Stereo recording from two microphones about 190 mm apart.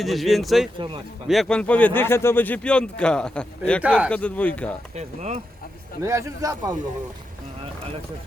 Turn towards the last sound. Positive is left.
turn(degrees=-20)  # may be behind; listen again after turning